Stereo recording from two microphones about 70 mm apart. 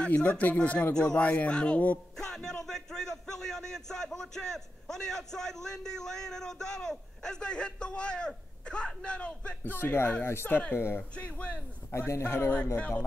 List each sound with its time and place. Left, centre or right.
0.1 s a man's voice: left
2.1 s a man's voice: centre
9.6 s a man's voice: left
10.2 s a man's voice: left
11.1 s a man's voice: centre
11.9 s a man's voice: left
12.7 s a man's voice: left